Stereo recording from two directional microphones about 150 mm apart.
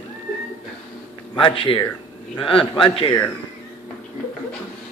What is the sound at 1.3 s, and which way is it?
A man's voice, 35° left (ahead or behind).